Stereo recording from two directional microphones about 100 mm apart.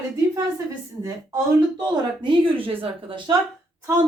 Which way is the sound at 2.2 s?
60° right (ahead or behind).